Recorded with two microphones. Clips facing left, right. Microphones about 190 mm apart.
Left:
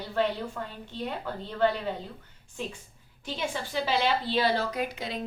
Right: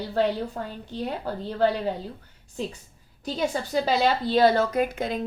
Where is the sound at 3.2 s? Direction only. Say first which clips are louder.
Right 6 dB; 40° right (ahead or behind).